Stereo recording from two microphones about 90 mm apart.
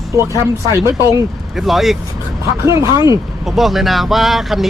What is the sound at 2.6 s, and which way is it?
Speech, 35° right (ahead or behind).